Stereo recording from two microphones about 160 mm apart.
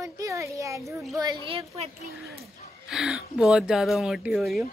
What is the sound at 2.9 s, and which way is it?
Speech, centre (ahead or behind).